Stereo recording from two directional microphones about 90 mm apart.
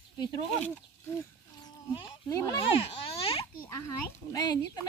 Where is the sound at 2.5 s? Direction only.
90° left.